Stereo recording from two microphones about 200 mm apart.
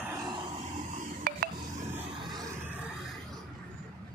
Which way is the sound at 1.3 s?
45° right (ahead or behind).